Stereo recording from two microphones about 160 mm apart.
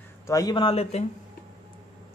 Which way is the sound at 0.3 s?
25° left (ahead or behind).